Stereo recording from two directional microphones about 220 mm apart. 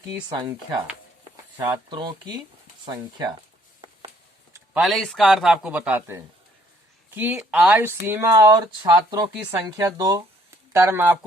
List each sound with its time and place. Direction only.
0.2 s speech: 20° right (ahead or behind)
1.6 s speech: 15° right (ahead or behind)
4.5 s speech: 5° right (ahead or behind)